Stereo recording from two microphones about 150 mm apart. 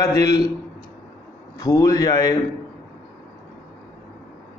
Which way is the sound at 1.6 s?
20° left (ahead or behind).